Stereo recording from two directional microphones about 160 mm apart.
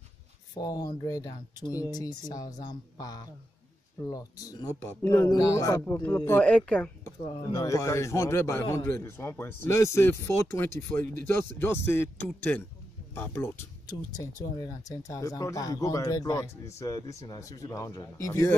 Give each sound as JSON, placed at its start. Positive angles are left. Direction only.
{"t": 0.6, "sound": "a man's voice", "side_deg": 20}
{"t": 7.2, "sound": "a man's voice", "side_deg": 30}
{"t": 13.8, "sound": "speech", "side_deg": 25}